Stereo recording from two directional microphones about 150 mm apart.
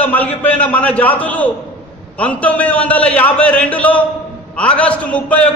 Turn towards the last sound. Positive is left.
turn(degrees=10)  # may be behind; listen again after turning